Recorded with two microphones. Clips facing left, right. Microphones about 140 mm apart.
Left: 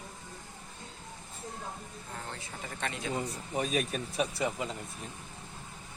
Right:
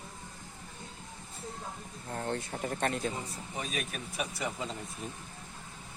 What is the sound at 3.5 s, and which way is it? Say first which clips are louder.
Speech: left 7 dB; 40° left (ahead or behind).